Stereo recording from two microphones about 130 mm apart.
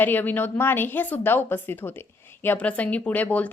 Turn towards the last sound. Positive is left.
turn(degrees=10)  # may be behind; listen again after turning